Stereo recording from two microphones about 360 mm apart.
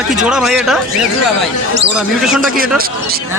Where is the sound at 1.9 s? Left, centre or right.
Centre.